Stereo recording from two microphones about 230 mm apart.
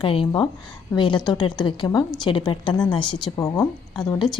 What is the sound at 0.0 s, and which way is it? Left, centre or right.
Speech, left.